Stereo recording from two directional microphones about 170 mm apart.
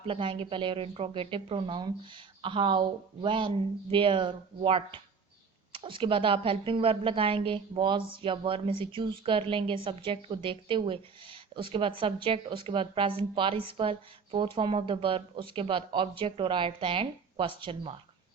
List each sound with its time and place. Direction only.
0.0 s a woman's voice: 30° right (ahead or behind)